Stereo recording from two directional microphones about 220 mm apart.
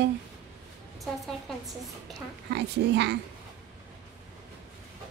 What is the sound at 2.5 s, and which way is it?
Speech, 50° right (ahead or behind).